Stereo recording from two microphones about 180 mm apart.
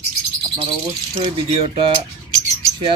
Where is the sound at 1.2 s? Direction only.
30° right (ahead or behind).